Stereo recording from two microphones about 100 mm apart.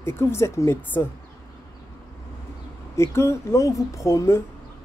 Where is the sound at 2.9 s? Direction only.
25° left (ahead or behind).